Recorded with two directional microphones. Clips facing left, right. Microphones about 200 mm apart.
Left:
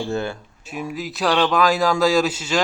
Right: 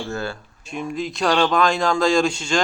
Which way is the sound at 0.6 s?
5° left (ahead or behind).